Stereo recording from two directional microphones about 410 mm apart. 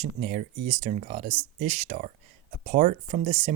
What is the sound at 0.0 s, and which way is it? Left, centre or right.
Speech, centre.